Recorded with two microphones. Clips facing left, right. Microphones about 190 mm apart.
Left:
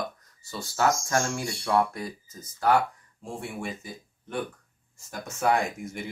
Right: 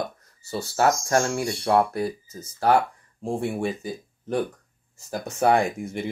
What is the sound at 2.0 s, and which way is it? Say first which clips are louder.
Speech: right 8 dB; 30° right (ahead or behind).